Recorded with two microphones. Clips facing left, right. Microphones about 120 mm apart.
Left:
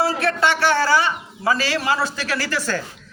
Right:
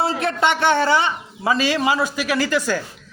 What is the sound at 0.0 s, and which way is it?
A man's voice, 20° right (ahead or behind).